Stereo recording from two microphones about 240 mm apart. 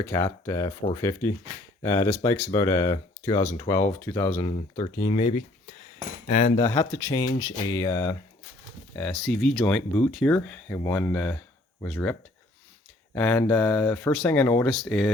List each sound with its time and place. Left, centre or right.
0.0 s speech: centre
6.2 s speech: left
6.6 s speech: centre
13.1 s speech: centre